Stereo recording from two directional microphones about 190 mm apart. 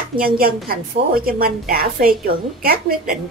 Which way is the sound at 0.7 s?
50° right (ahead or behind).